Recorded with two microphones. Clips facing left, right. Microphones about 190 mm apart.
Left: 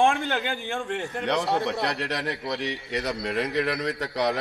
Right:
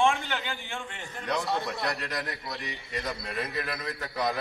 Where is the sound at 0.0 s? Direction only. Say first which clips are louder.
Left 4 dB; 55° left (ahead or behind).